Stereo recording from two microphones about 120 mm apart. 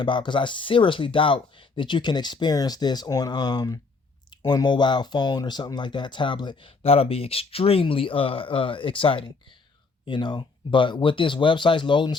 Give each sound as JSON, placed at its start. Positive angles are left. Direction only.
{"t": 0.0, "sound": "speech", "side_deg": 40}